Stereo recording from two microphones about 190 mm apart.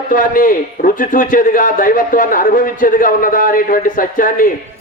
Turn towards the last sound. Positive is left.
turn(degrees=45)  # may be behind; listen again after turning